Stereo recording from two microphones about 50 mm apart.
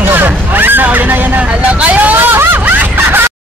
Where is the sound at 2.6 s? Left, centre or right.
Right.